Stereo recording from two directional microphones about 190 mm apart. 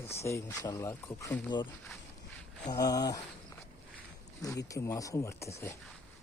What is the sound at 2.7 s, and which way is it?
Speech, 20° left (ahead or behind).